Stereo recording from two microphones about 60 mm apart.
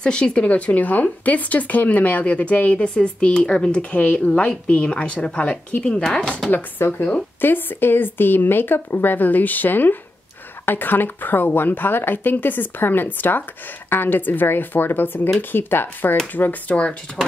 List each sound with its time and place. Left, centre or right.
0.0 s speech: centre
6.5 s speech: left